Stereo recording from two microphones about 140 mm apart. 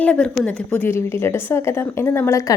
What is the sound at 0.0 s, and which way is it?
A woman's voice, 5° left (ahead or behind).